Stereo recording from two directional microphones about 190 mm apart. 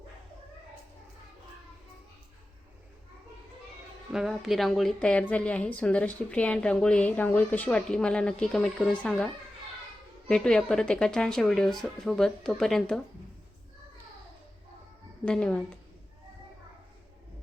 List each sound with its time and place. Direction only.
4.1 s a woman's voice: centre (ahead or behind)
15.2 s a woman's voice: 5° left (ahead or behind)